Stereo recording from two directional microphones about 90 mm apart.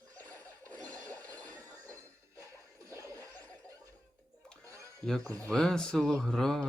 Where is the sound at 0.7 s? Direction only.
15° left (ahead or behind).